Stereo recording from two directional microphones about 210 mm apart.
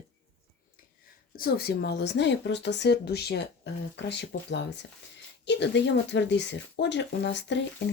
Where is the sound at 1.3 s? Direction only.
45° left (ahead or behind).